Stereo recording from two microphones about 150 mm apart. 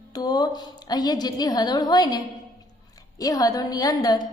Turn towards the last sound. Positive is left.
turn(degrees=25)  # may be behind; listen again after turning